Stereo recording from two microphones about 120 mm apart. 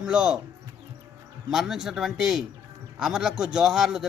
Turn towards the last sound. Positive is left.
turn(degrees=-5)  # may be behind; listen again after turning